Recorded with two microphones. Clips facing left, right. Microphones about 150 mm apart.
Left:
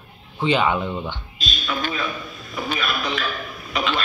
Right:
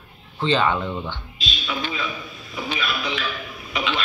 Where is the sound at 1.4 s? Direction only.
45° left (ahead or behind).